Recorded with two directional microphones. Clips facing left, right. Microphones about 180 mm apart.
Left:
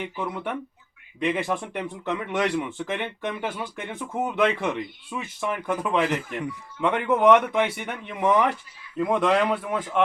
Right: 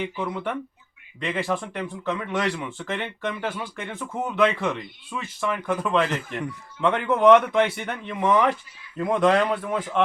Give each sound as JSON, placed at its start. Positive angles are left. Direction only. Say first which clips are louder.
{"t": 1.2, "sound": "speech", "louder": "left 1 dB", "side_deg": 15}